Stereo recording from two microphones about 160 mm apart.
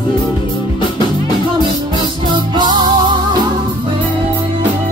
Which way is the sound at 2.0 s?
30° right (ahead or behind).